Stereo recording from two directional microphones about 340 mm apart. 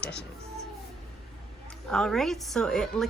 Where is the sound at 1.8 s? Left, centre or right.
Centre.